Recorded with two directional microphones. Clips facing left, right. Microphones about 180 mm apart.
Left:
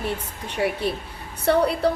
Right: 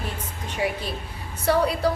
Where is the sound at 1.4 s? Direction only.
60° left (ahead or behind).